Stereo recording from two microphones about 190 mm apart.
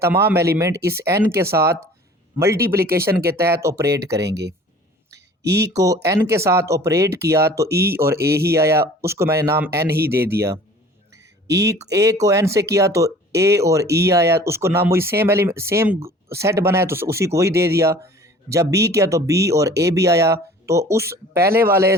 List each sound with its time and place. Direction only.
0.0 s speech: 10° right (ahead or behind)
4.3 s speech: 60° right (ahead or behind)
5.7 s speech: 15° right (ahead or behind)
7.7 s speech: 55° right (ahead or behind)
7.9 s speech: 15° right (ahead or behind)
8.2 s speech: 55° right (ahead or behind)
8.4 s speech: 15° right (ahead or behind)
9.8 s speech: 55° right (ahead or behind)
10.1 s speech: 10° right (ahead or behind)
11.5 s speech: 15° right (ahead or behind)